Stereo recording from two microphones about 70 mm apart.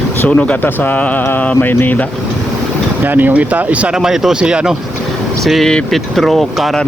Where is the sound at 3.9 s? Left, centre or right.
Centre.